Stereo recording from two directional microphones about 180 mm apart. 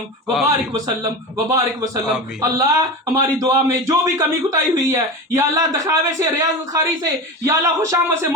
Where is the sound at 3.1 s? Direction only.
20° right (ahead or behind).